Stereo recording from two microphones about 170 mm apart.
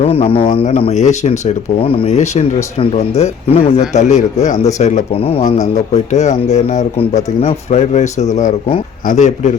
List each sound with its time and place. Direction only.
0.0 s a man's voice: 35° left (ahead or behind)
1.8 s a man's voice: 35° left (ahead or behind)